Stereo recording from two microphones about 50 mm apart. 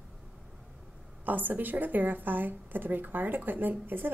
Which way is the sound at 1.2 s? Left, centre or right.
Right.